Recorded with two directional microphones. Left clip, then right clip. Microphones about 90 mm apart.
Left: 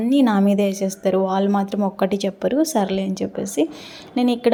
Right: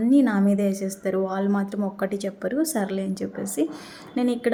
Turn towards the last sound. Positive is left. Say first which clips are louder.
# left 5 dB
turn(degrees=30)  # may be behind; listen again after turning